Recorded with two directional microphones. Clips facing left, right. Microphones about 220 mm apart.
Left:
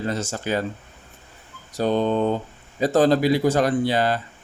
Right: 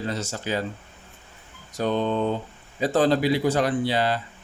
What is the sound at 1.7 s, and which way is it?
Speech, 35° left (ahead or behind).